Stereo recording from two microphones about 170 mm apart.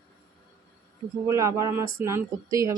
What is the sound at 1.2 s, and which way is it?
Speech, 20° right (ahead or behind).